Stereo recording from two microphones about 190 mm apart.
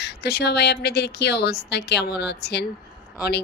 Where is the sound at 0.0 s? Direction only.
60° left (ahead or behind).